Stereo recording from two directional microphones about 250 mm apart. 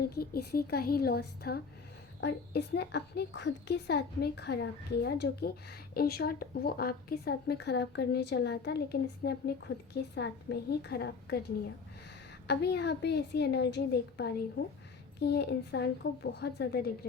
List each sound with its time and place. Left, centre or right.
0.0 s a woman's voice: left